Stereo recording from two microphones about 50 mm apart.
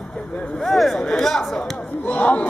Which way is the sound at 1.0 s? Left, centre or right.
Centre.